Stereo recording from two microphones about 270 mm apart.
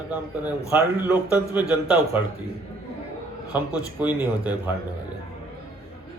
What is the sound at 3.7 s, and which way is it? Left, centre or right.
Speech, centre.